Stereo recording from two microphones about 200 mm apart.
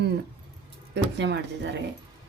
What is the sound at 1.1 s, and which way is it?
Speech, 60° right (ahead or behind).